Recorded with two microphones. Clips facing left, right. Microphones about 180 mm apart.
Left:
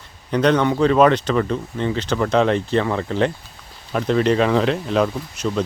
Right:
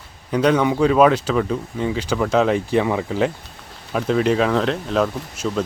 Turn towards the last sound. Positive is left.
turn(degrees=0)  # may be behind; listen again after turning